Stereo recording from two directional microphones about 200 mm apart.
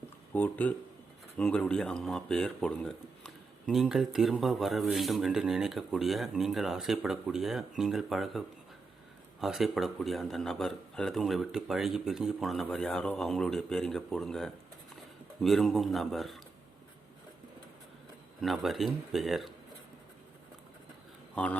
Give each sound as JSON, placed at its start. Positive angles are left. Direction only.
{"t": 0.3, "sound": "speech", "side_deg": 10}
{"t": 18.3, "sound": "speech", "side_deg": 0}
{"t": 21.3, "sound": "speech", "side_deg": 5}